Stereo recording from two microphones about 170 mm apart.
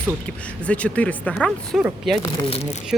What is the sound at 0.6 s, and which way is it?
Speech, 10° left (ahead or behind).